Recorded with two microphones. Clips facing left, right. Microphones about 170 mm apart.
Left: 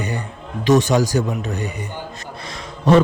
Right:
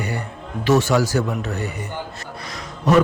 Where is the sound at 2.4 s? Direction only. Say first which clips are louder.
Left 2 dB; 25° left (ahead or behind).